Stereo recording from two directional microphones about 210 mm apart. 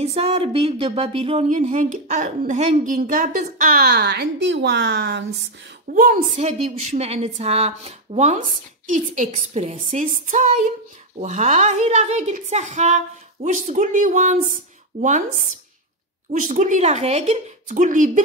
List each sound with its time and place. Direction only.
0.0 s speech: 30° right (ahead or behind); by 5.2 s 55° right (ahead or behind)
5.9 s speech: 40° right (ahead or behind)
16.3 s speech: 35° right (ahead or behind)